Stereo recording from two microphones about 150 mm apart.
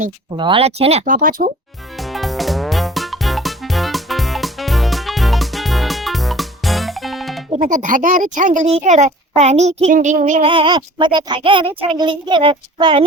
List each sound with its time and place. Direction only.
0.3 s speech: 35° right (ahead or behind)
1.0 s speech: 65° right (ahead or behind)
2.0 s music: centre (ahead or behind)
7.6 s a child's voice: 60° right (ahead or behind)
10.4 s speech: 35° right (ahead or behind)